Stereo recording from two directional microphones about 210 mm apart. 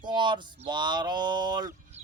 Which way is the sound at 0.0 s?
20° right (ahead or behind).